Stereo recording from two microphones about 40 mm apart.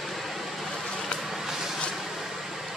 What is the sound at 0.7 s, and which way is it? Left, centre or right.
Vehicle, centre.